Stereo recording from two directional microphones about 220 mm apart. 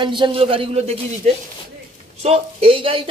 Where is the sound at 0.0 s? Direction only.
20° right (ahead or behind).